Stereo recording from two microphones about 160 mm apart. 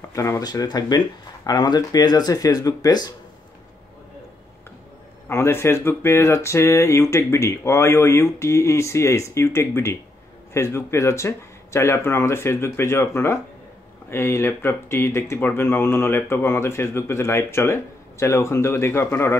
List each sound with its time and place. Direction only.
0.1 s speech: 20° left (ahead or behind)
5.3 s speech: 15° left (ahead or behind)